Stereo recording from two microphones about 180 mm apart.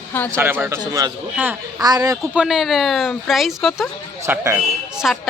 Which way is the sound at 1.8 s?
20° right (ahead or behind).